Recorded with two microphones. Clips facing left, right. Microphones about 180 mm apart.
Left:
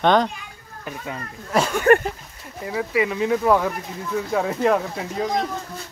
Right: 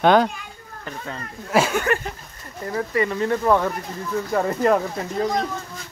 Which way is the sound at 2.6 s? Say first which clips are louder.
Even; 5° left (ahead or behind).